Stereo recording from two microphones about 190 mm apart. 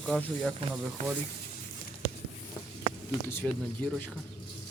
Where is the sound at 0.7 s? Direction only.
5° right (ahead or behind).